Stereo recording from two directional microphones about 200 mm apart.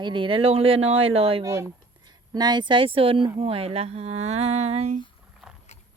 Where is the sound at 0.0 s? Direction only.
25° right (ahead or behind).